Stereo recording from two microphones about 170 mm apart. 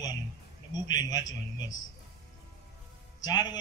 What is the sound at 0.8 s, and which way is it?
Speech, 25° left (ahead or behind).